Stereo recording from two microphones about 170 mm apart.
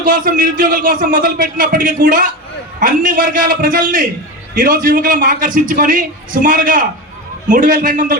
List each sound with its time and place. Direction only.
0.0 s a man's voice: 55° right (ahead or behind)